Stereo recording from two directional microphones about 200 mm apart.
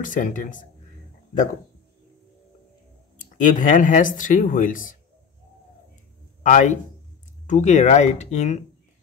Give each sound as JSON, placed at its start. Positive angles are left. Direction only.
{"t": 0.0, "sound": "speech", "side_deg": 40}
{"t": 3.3, "sound": "speech", "side_deg": 40}
{"t": 6.4, "sound": "speech", "side_deg": 40}